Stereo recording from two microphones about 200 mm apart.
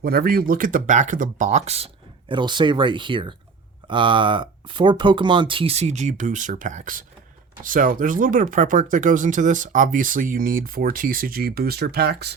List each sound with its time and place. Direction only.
0.0 s speech: 50° right (ahead or behind)